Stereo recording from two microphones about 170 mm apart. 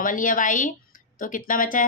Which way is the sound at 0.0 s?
50° left (ahead or behind).